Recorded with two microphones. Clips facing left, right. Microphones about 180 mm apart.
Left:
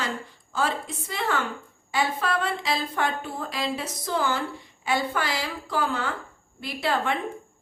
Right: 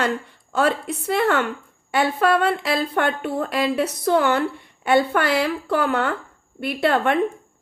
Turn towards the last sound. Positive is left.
turn(degrees=-60)  # may be behind; listen again after turning